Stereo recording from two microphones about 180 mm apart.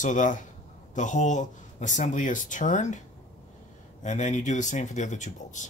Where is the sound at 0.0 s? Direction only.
45° left (ahead or behind).